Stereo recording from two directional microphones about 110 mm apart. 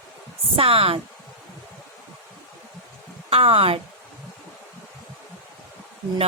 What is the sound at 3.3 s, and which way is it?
Speech, 60° right (ahead or behind).